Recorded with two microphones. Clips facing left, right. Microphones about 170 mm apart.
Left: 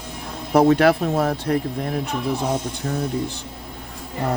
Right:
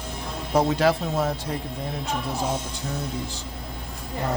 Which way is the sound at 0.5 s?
60° left (ahead or behind).